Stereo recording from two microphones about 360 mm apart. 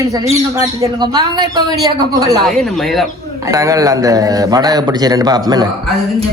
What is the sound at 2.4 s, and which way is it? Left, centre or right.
Speech, centre.